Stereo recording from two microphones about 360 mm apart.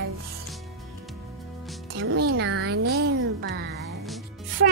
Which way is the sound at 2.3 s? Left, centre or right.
Right.